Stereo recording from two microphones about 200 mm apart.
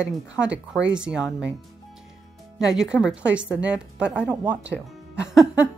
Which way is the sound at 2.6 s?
5° right (ahead or behind).